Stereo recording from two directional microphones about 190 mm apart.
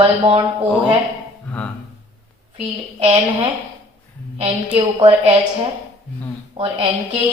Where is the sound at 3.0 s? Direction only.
25° right (ahead or behind).